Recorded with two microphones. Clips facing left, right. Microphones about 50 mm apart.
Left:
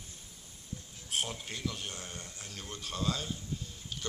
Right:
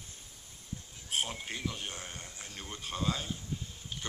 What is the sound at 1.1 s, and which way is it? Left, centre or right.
A man's voice, centre.